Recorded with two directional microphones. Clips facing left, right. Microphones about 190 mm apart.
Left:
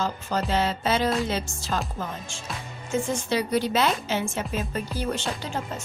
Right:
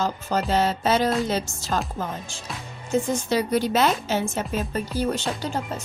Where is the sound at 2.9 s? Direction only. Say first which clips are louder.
Right 3 dB; 40° right (ahead or behind).